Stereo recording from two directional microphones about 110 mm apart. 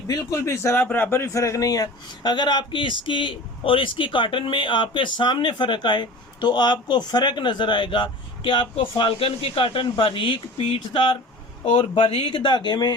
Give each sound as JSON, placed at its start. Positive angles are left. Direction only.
{"t": 0.1, "sound": "speech", "side_deg": 30}
{"t": 11.6, "sound": "speech", "side_deg": 65}